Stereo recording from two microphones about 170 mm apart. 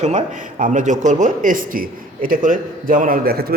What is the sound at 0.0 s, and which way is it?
A man's voice, 45° right (ahead or behind).